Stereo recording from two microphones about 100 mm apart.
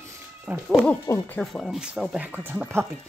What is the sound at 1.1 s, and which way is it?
Speech, 35° left (ahead or behind).